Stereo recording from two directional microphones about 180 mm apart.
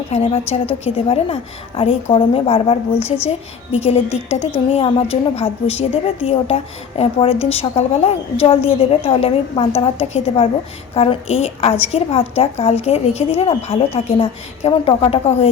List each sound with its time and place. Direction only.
0.1 s a woman's voice: 35° left (ahead or behind)